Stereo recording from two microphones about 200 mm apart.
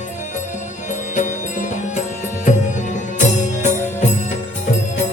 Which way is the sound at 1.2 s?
35° left (ahead or behind).